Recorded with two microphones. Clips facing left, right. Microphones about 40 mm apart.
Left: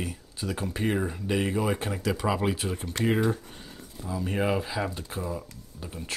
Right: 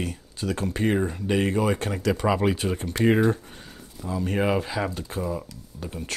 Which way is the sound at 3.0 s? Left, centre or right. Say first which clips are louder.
Right 6 dB; right.